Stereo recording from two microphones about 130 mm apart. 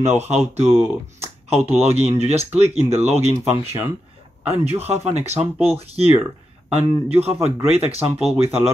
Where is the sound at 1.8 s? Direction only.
55° right (ahead or behind).